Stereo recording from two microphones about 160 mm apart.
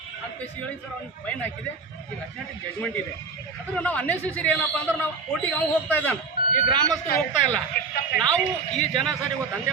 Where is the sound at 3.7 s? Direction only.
10° left (ahead or behind).